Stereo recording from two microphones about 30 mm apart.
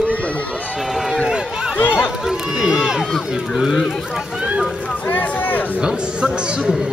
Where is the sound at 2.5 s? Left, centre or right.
Centre.